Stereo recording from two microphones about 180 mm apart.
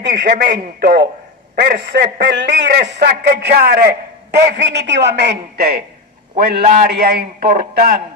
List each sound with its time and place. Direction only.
0.0 s a man's voice: 75° right (ahead or behind); by 3.9 s 60° right (ahead or behind)
4.6 s a man's voice: 70° right (ahead or behind)
6.5 s a man's voice: 50° right (ahead or behind)